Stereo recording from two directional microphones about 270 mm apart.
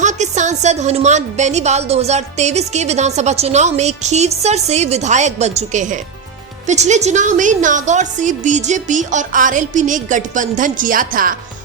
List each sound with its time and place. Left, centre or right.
0.0 s speech: right